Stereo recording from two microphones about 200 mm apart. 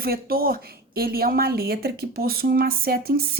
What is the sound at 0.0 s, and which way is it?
A woman's voice, 50° right (ahead or behind).